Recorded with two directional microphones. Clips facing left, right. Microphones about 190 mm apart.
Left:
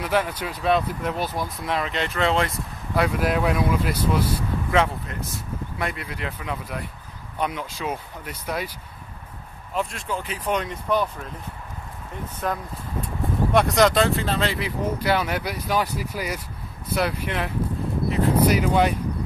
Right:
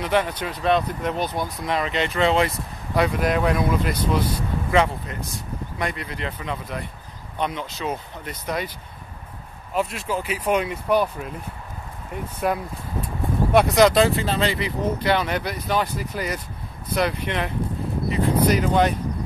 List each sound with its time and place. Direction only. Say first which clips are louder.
0.0 s speech: right 1 dB; 5° left (ahead or behind)
9.8 s speech: right 3 dB; 5° right (ahead or behind)
12.4 s speech: right 4 dB; 10° right (ahead or behind); by 18.9 s 10° left (ahead or behind)